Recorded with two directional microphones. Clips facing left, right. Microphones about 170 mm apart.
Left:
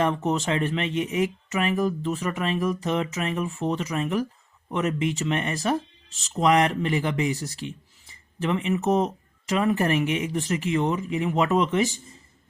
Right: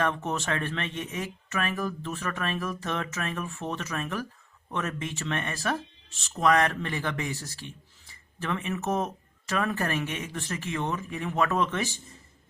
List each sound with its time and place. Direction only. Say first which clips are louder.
0.0 s speech: left 5 dB; 15° left (ahead or behind)